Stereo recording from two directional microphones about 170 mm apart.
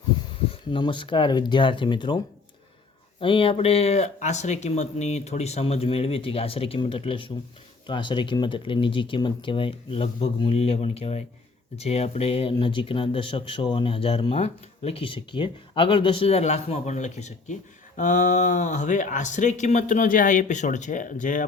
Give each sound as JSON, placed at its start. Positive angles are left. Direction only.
{"t": 0.7, "sound": "speech", "side_deg": 30}